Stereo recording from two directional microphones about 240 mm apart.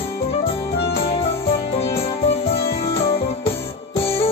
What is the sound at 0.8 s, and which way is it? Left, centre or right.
Music, left.